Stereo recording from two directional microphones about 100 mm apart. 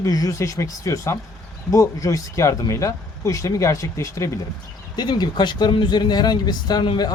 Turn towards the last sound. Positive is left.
turn(degrees=45)  # may be behind; listen again after turning